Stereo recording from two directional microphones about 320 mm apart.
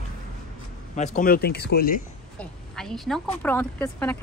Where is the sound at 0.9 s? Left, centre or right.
Left.